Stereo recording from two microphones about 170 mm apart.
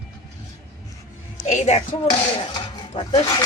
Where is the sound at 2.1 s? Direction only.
25° left (ahead or behind).